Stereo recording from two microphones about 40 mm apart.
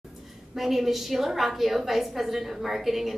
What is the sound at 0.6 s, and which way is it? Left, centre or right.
A woman's voice, centre.